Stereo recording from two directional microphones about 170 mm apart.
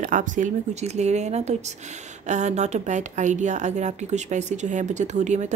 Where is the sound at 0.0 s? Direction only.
50° right (ahead or behind).